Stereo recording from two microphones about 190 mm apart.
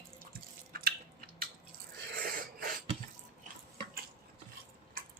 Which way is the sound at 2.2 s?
50° right (ahead or behind).